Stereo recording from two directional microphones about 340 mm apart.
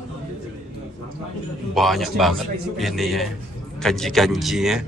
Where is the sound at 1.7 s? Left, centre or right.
Centre.